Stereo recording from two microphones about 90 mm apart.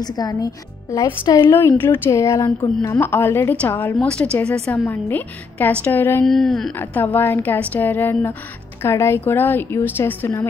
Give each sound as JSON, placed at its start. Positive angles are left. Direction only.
{"t": 0.0, "sound": "a woman's voice", "side_deg": 45}
{"t": 1.3, "sound": "a woman's voice", "side_deg": 25}
{"t": 3.0, "sound": "a woman's voice", "side_deg": 25}
{"t": 4.1, "sound": "a woman's voice", "side_deg": 10}
{"t": 6.2, "sound": "speech", "side_deg": 5}
{"t": 6.8, "sound": "a woman's voice", "side_deg": 20}